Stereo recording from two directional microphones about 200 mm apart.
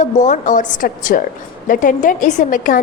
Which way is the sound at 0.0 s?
40° left (ahead or behind).